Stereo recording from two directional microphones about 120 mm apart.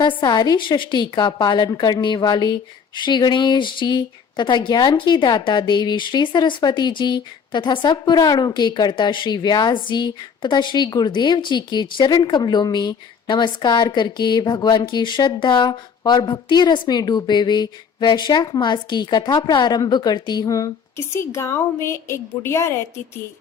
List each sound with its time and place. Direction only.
0.2 s a woman's voice: 35° left (ahead or behind)